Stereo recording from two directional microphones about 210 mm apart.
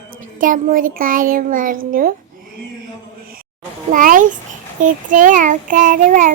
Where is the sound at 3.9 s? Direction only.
40° right (ahead or behind).